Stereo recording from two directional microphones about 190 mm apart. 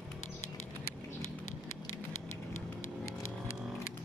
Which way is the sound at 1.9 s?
90° left.